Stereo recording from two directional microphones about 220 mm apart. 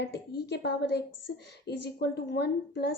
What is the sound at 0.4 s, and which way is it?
A woman's voice, 50° left (ahead or behind).